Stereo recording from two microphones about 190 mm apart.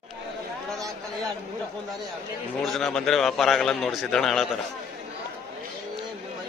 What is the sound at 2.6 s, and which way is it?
A man's voice, centre (ahead or behind).